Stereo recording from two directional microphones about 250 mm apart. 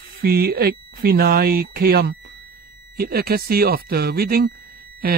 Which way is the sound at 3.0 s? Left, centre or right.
Right.